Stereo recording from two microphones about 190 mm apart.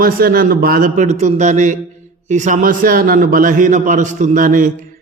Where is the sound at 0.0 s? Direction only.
50° right (ahead or behind).